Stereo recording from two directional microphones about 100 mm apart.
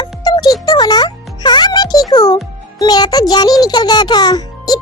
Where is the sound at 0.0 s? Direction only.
45° left (ahead or behind).